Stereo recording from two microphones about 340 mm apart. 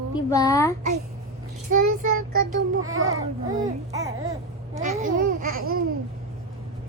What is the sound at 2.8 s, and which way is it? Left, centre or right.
Speech, right.